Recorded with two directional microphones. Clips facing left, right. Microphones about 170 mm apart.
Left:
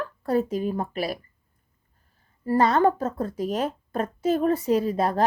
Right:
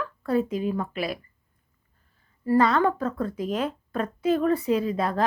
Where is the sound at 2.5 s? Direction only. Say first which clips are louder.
Left 1 dB; 35° left (ahead or behind).